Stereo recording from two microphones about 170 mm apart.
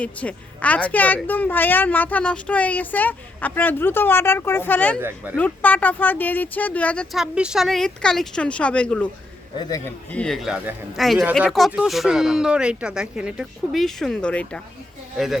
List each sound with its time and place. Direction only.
0.0 s a woman's voice: 10° left (ahead or behind)
4.9 s speech: 10° right (ahead or behind)
5.4 s a woman's voice: 10° left (ahead or behind)
9.6 s a man's voice: 20° left (ahead or behind)
10.1 s speech: 5° left (ahead or behind)